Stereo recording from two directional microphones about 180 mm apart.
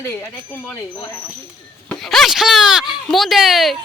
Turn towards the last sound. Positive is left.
turn(degrees=0)  # may be behind; listen again after turning